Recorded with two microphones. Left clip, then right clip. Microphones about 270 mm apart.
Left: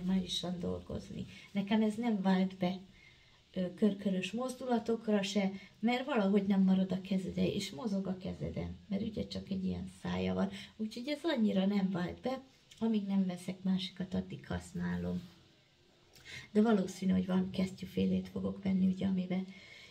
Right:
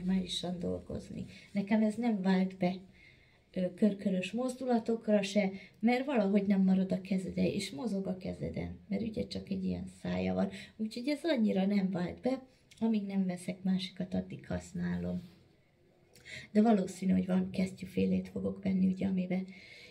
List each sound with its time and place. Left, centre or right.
0.1 s a sound: centre
0.9 s speech: centre
16.3 s speech: centre